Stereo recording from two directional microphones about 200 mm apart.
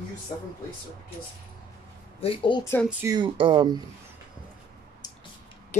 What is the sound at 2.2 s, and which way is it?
Speech, 25° left (ahead or behind).